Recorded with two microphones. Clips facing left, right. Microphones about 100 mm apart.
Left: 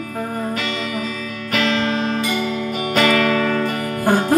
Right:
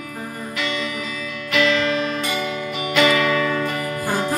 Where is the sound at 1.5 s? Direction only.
40° left (ahead or behind).